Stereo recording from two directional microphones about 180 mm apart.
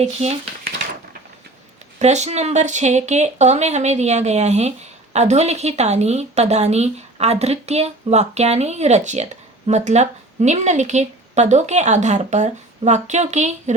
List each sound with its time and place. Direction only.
0.0 s a woman's voice: 35° right (ahead or behind)
2.0 s a woman's voice: 40° right (ahead or behind)